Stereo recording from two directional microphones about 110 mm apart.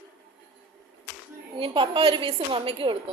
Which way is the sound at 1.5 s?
50° right (ahead or behind).